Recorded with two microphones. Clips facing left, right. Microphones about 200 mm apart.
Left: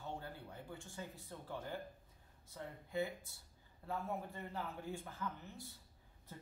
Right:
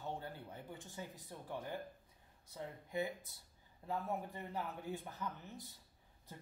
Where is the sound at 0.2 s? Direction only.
20° right (ahead or behind).